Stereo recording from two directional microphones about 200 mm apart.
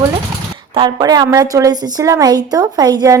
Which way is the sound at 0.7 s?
20° right (ahead or behind).